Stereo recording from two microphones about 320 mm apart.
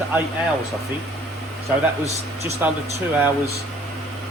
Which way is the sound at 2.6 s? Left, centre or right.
Centre.